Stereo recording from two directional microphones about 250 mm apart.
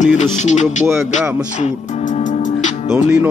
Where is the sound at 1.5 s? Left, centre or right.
Left.